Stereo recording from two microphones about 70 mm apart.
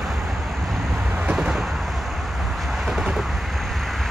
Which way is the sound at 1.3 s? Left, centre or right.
Centre.